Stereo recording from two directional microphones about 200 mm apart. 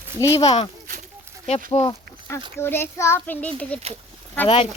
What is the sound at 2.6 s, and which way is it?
A child's voice, 10° left (ahead or behind).